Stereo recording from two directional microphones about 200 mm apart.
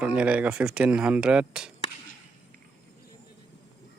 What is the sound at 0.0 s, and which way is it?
Speech, 5° right (ahead or behind).